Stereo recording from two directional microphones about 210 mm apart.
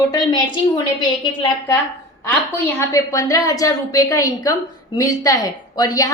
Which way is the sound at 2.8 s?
15° left (ahead or behind).